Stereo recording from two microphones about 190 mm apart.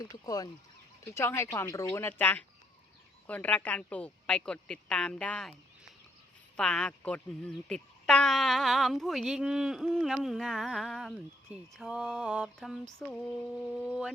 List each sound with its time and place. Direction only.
0.1 s a woman's voice: 20° left (ahead or behind); by 5.5 s 5° left (ahead or behind)
6.6 s speech: 5° left (ahead or behind)